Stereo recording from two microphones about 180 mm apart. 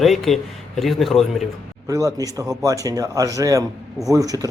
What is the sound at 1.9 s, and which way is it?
Speech, 20° right (ahead or behind).